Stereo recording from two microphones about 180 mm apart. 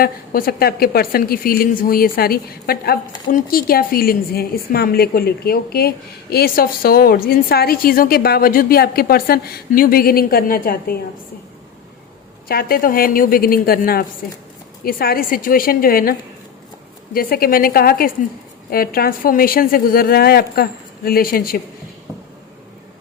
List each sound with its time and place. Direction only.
0.0 s a woman's voice: 55° left (ahead or behind)
12.5 s a woman's voice: 55° left (ahead or behind)
17.2 s a woman's voice: 55° left (ahead or behind)